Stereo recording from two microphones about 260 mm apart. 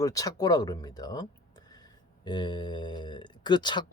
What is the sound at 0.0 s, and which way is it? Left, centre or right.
Speech, centre.